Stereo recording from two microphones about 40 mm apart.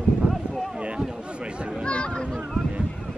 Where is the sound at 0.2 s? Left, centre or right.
Right.